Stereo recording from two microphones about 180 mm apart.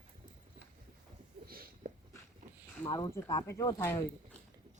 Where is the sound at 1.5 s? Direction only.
55° right (ahead or behind).